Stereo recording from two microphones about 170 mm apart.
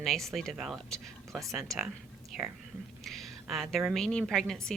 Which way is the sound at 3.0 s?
Centre (ahead or behind).